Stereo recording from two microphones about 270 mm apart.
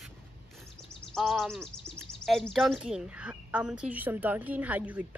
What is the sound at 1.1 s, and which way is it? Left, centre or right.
Speech, centre.